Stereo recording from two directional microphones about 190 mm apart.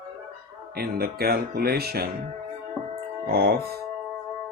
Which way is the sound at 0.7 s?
55° right (ahead or behind).